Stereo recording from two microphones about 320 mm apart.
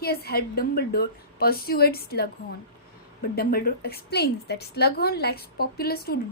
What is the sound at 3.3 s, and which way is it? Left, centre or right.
A woman's voice, left.